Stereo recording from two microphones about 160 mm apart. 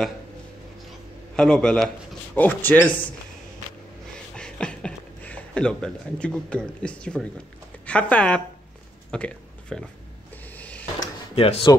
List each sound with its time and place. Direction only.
1.3 s a man's voice: 5° left (ahead or behind)
4.4 s speech: 5° left (ahead or behind)
10.3 s a sound: 10° left (ahead or behind)
11.3 s speech: 35° left (ahead or behind)